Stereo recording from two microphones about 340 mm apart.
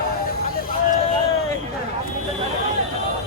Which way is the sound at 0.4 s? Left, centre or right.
Left.